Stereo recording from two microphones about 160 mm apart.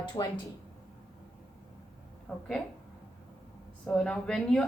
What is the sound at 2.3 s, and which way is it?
Speech, 10° left (ahead or behind).